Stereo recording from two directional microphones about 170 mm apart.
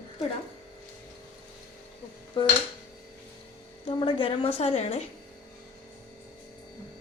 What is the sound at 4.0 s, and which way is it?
A woman's voice, 30° left (ahead or behind).